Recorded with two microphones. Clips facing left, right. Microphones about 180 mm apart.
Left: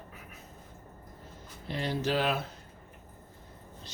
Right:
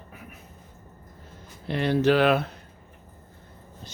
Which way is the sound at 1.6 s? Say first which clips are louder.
Right 10 dB; 65° right (ahead or behind).